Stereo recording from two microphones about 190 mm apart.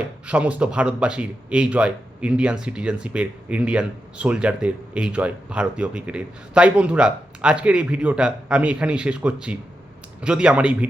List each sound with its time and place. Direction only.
0.3 s speech: 5° right (ahead or behind)